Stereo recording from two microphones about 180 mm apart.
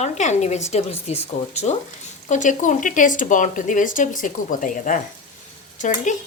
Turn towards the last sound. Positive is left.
turn(degrees=45)  # may be behind; listen again after turning